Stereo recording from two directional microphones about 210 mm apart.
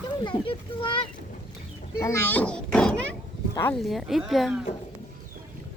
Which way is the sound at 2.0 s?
10° left (ahead or behind).